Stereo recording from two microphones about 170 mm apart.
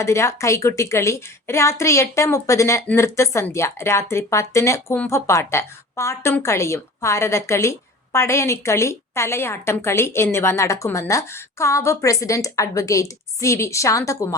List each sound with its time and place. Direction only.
0.0 s speech: 15° left (ahead or behind)